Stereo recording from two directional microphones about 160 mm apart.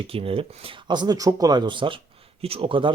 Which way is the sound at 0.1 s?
35° right (ahead or behind).